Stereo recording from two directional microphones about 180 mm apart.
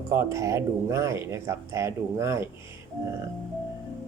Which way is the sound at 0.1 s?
15° right (ahead or behind).